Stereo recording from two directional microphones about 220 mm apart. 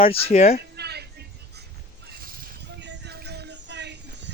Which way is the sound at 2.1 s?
40° right (ahead or behind).